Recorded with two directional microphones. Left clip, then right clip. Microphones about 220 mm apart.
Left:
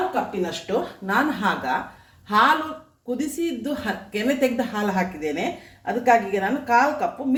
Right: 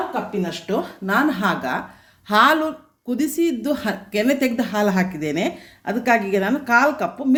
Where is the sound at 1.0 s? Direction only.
45° right (ahead or behind).